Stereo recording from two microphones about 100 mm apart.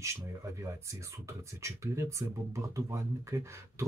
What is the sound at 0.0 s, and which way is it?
Speech, 30° right (ahead or behind).